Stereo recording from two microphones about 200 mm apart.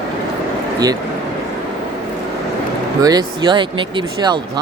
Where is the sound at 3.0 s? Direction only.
20° right (ahead or behind).